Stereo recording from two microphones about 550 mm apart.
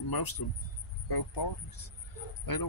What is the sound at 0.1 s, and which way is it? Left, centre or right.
Speech, left.